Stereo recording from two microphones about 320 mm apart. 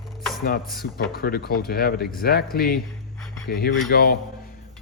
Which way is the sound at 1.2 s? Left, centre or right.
Left.